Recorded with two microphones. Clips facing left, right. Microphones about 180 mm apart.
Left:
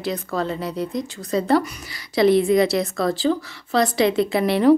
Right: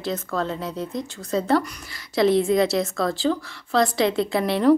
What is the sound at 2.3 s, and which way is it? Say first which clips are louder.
Speech: left 3 dB; 65° left (ahead or behind).